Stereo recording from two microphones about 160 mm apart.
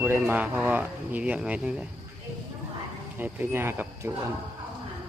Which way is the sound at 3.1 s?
15° right (ahead or behind).